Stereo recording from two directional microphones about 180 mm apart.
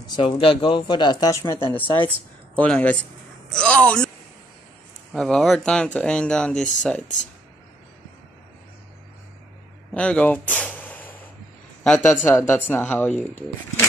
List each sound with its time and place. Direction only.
0.1 s speech: 30° left (ahead or behind); by 4.1 s 5° left (ahead or behind)
5.1 s speech: 5° left (ahead or behind)
9.9 s a sound: 5° left (ahead or behind)
11.8 s speech: 5° left (ahead or behind)
12.3 s speech: 15° left (ahead or behind)